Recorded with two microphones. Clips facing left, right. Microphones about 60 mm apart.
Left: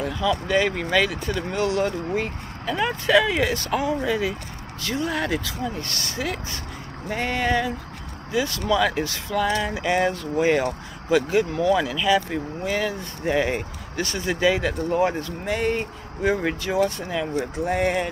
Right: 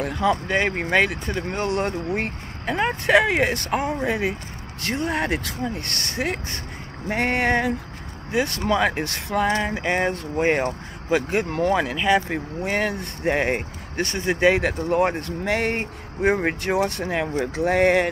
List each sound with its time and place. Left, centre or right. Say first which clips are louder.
0.0 s speech: right 2 dB; right
0.5 s speech: even; right
7.1 s a sound: right 2 dB; right
8.3 s speech: right 1 dB; right
14.5 s speech: right 2 dB; right
15.4 s speech: right 1 dB; right
16.7 s speech: left 1 dB; right
17.6 s a sound: right 5 dB; right